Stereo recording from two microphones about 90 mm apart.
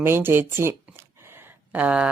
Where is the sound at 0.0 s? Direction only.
25° right (ahead or behind).